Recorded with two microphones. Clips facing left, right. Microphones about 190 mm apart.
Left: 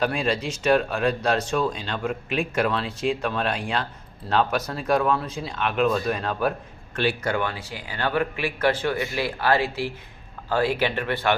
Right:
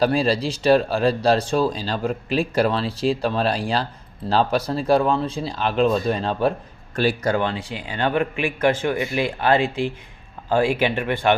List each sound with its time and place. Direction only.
0.0 s a man's voice: 35° right (ahead or behind)
6.9 s speech: 40° right (ahead or behind)
7.4 s a man's voice: 20° right (ahead or behind)